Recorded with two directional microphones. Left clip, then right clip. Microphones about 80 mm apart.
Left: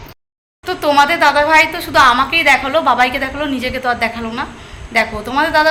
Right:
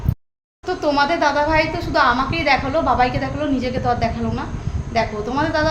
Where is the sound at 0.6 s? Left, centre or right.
Centre.